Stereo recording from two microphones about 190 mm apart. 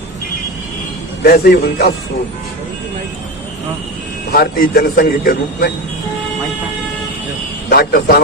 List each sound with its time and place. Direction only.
1.2 s speech: 55° left (ahead or behind)
4.3 s speech: 50° left (ahead or behind)
7.7 s speech: 55° left (ahead or behind)